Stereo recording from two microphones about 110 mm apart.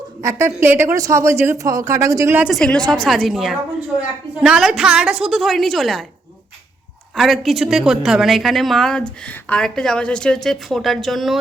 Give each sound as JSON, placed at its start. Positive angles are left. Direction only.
{"t": 0.2, "sound": "speech", "side_deg": -25}
{"t": 0.9, "sound": "speech", "side_deg": -30}
{"t": 2.5, "sound": "a woman's voice", "side_deg": 5}
{"t": 7.2, "sound": "a woman's voice", "side_deg": 0}